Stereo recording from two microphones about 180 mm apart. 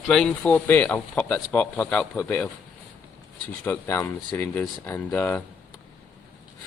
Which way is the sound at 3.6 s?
15° left (ahead or behind).